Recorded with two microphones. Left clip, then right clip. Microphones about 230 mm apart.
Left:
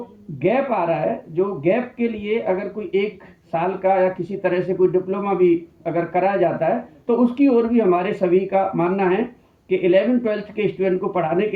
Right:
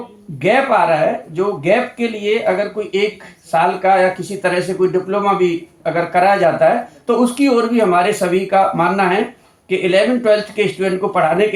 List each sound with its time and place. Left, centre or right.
0.3 s speech: right